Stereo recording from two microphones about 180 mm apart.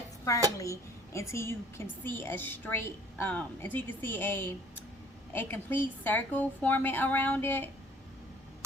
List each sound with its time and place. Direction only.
0.5 s a woman's voice: 15° left (ahead or behind)